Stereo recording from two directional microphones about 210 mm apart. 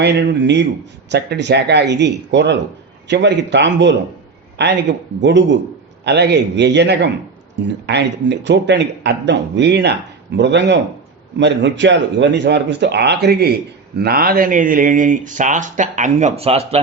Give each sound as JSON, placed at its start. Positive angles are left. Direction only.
{"t": 0.0, "sound": "a man's voice", "side_deg": -55}